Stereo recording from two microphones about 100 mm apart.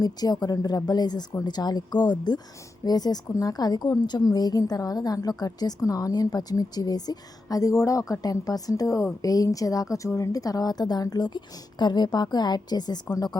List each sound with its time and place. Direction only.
0.0 s a woman's voice: 40° left (ahead or behind)